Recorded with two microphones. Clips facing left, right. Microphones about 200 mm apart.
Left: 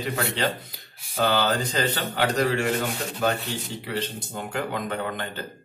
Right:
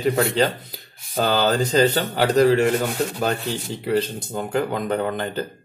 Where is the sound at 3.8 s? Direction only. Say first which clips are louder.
Right 11 dB; 40° right (ahead or behind).